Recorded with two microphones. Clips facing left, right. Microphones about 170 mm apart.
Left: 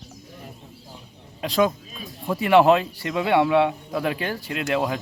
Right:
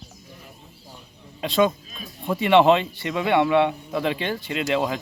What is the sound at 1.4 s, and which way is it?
Speech, 10° left (ahead or behind).